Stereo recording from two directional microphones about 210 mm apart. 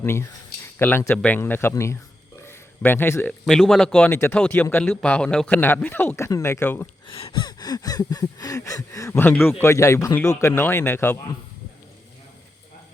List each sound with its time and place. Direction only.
0.0 s speech: 10° left (ahead or behind)
7.1 s speech: 25° left (ahead or behind)